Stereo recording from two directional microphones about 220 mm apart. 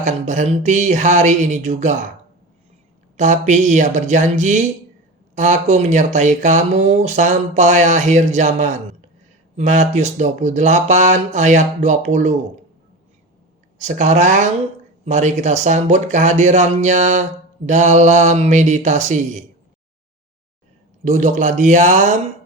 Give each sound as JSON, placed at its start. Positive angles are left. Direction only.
{"t": 0.0, "sound": "speech", "side_deg": -35}
{"t": 3.2, "sound": "speech", "side_deg": -35}
{"t": 13.7, "sound": "speech", "side_deg": -35}
{"t": 21.0, "sound": "speech", "side_deg": -35}